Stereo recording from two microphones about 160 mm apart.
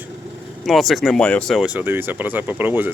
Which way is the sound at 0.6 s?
Centre (ahead or behind).